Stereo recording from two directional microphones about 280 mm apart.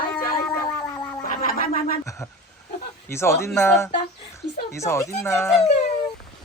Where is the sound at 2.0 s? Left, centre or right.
Centre.